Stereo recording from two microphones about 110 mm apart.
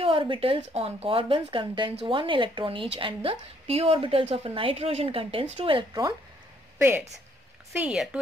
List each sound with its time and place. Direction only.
0.0 s speech: 55° right (ahead or behind)
7.7 s speech: 10° right (ahead or behind)